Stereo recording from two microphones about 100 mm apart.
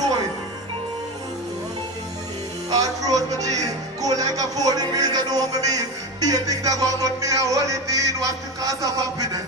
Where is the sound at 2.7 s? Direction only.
40° right (ahead or behind).